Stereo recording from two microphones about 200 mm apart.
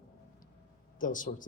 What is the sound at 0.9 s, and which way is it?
Speech, 40° left (ahead or behind).